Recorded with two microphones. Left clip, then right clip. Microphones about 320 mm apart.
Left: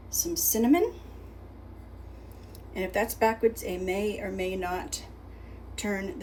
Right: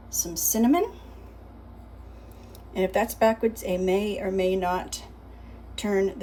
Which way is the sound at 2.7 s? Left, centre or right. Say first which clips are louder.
Right 4 dB; centre.